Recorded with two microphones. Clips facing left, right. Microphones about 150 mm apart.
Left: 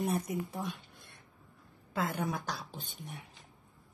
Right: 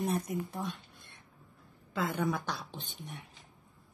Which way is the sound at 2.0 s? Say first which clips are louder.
Right 2 dB; centre (ahead or behind).